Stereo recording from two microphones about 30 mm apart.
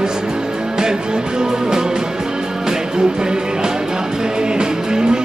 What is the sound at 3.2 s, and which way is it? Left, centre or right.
Music, right.